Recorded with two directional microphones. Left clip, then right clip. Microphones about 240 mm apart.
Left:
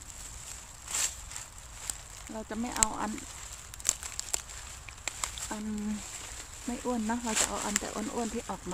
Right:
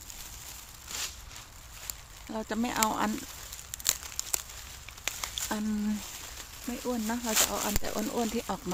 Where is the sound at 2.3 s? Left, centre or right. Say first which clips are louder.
Right 3 dB; right.